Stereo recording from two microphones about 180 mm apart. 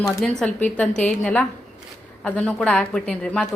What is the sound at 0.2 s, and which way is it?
A woman's voice, 5° left (ahead or behind).